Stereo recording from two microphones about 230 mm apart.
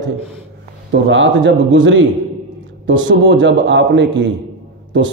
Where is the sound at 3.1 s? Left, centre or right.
Right.